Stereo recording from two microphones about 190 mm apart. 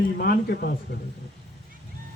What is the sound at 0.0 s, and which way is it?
Speech, 55° left (ahead or behind).